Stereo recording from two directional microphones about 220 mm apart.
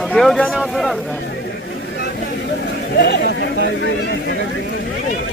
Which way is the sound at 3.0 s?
50° left (ahead or behind).